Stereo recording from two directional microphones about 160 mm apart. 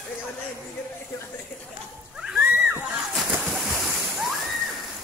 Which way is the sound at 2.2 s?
5° right (ahead or behind).